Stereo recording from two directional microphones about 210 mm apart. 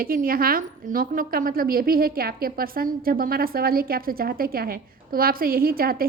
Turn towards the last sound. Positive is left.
turn(degrees=-45)  # may be behind; listen again after turning